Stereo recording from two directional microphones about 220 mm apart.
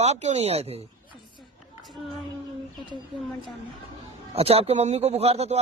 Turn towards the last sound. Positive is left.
turn(degrees=-30)  # may be behind; listen again after turning